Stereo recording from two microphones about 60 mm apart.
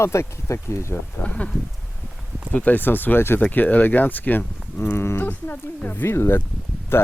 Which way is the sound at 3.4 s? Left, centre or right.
Left.